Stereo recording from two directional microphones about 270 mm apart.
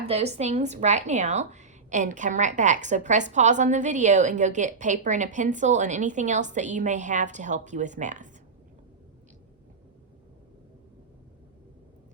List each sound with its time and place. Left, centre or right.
0.1 s a woman's voice: right